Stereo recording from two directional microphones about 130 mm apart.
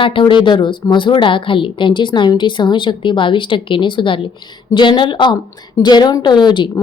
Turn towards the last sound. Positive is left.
turn(degrees=35)  # may be behind; listen again after turning